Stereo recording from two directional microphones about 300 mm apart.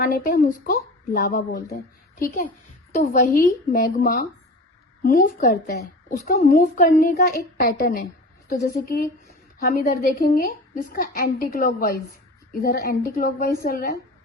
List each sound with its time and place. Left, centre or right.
0.0 s a woman's voice: left